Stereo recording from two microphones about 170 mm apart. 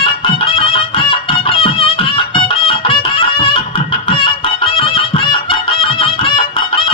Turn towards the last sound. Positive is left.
turn(degrees=30)  # may be behind; listen again after turning